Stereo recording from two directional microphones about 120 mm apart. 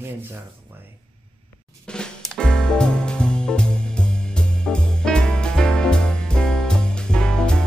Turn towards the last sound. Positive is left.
turn(degrees=5)  # may be behind; listen again after turning